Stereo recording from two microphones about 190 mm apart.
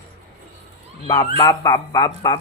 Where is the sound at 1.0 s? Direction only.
20° left (ahead or behind).